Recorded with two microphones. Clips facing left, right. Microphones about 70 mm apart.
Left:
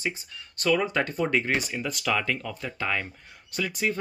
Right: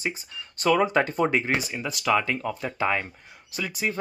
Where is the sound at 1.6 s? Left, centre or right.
Centre.